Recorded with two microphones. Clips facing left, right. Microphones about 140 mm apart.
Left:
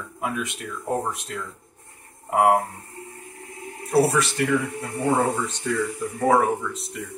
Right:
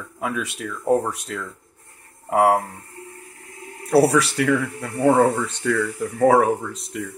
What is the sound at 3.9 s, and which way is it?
Speech, 65° right (ahead or behind).